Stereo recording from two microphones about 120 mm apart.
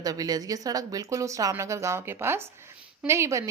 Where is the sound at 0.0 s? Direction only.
30° right (ahead or behind).